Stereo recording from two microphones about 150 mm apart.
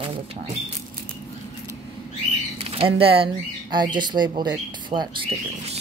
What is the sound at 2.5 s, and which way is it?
Speech, 40° right (ahead or behind).